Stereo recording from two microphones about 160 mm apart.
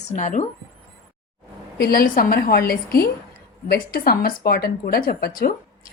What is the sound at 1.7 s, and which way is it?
A woman's voice, 65° left (ahead or behind).